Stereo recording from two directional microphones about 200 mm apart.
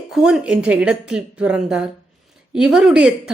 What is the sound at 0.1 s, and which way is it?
A woman's voice, centre (ahead or behind).